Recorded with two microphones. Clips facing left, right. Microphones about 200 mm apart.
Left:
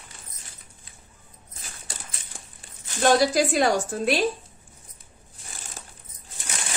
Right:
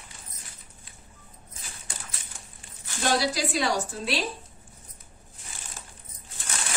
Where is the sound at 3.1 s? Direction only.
50° left (ahead or behind).